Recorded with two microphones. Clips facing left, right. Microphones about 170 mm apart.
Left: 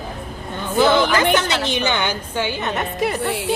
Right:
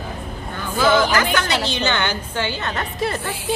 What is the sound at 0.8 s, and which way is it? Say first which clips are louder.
A woman's voice: left 1 dB; 25° left (ahead or behind).